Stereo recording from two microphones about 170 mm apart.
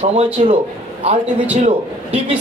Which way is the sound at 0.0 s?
40° right (ahead or behind).